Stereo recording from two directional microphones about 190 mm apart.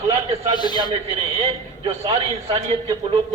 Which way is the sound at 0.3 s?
30° right (ahead or behind).